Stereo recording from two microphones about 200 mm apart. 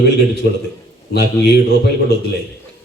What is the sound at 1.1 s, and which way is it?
Speech, 55° left (ahead or behind).